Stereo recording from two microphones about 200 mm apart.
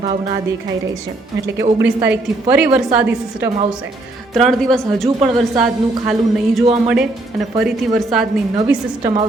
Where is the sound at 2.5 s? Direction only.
5° right (ahead or behind).